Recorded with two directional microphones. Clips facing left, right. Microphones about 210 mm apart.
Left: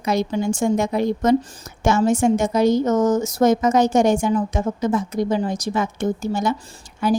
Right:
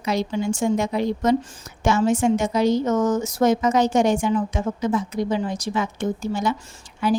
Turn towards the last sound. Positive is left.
turn(degrees=45)  # may be behind; listen again after turning